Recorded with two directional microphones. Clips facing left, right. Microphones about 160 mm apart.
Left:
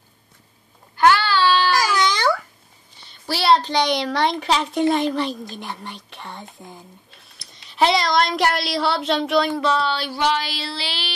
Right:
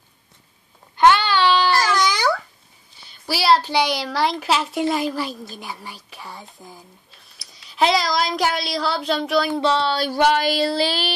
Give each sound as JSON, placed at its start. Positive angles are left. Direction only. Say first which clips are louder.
{"t": 0.9, "sound": "child singing", "louder": "right 1 dB", "side_deg": -20}
{"t": 2.0, "sound": "babbling", "louder": "even", "side_deg": -5}
{"t": 3.0, "sound": "speech", "louder": "even", "side_deg": -5}
{"t": 9.6, "sound": "a sound", "louder": "right 2 dB", "side_deg": -30}